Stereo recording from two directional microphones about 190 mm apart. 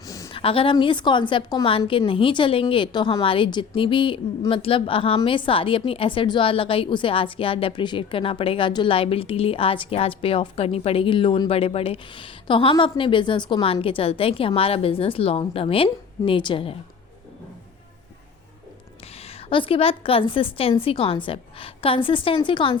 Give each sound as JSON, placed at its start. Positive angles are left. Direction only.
{"t": 0.3, "sound": "a woman's voice", "side_deg": 30}
{"t": 19.5, "sound": "a woman's voice", "side_deg": 25}